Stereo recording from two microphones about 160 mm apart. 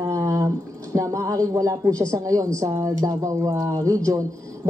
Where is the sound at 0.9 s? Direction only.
20° right (ahead or behind).